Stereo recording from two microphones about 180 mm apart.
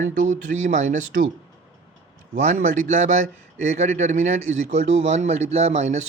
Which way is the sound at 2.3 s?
45° right (ahead or behind).